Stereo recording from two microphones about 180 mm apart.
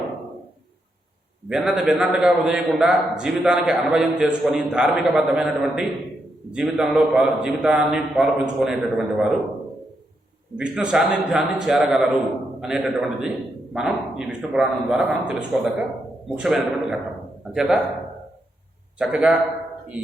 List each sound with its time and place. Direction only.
1.5 s a man's voice: 5° right (ahead or behind)
10.6 s a man's voice: 5° right (ahead or behind)
18.9 s a man's voice: 5° right (ahead or behind)